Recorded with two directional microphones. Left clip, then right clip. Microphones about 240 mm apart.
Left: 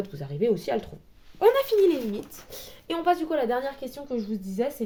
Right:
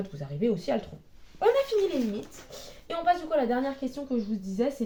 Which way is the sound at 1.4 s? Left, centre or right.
Left.